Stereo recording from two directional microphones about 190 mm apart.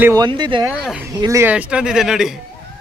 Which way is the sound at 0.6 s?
5° right (ahead or behind).